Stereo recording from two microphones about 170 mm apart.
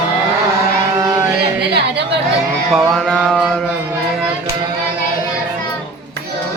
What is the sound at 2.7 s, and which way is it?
Mantra, centre (ahead or behind).